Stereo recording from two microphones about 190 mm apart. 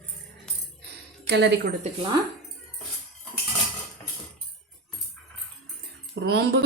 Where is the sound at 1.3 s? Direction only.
60° right (ahead or behind).